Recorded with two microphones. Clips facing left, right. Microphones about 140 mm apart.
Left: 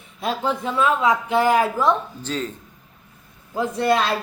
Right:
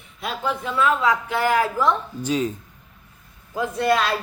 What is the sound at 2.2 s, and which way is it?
Speech, 10° right (ahead or behind).